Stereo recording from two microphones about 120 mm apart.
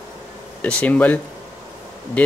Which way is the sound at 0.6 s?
10° left (ahead or behind).